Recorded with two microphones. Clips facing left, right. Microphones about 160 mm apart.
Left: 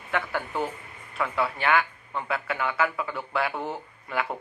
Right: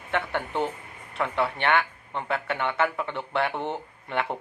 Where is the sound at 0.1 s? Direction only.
30° right (ahead or behind).